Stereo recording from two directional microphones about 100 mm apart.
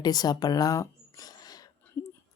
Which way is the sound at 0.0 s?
40° left (ahead or behind).